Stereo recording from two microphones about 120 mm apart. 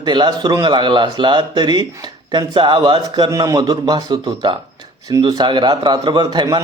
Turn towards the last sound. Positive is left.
turn(degrees=-35)  # may be behind; listen again after turning